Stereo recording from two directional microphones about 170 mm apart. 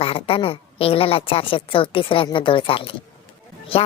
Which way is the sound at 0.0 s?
35° left (ahead or behind).